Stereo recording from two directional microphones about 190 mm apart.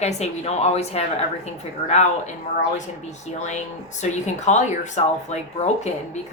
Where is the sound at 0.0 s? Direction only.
35° left (ahead or behind).